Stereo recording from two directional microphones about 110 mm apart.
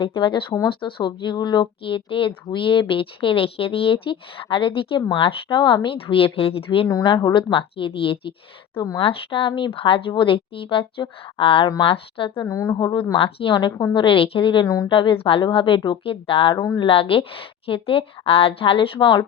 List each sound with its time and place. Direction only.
0.0 s speech: 50° left (ahead or behind)
7.2 s a woman's voice: 35° left (ahead or behind)
7.5 s speech: 55° left (ahead or behind)
12.4 s a woman's voice: 30° left (ahead or behind); by 14.7 s 50° left (ahead or behind)
14.7 s a woman's voice: 35° left (ahead or behind)
14.9 s speech: 50° left (ahead or behind)
16.6 s a woman's voice: 35° left (ahead or behind)
16.8 s a woman's voice: 55° left (ahead or behind)